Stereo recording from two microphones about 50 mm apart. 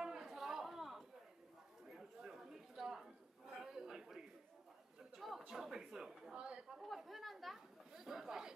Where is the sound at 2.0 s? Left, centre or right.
Centre.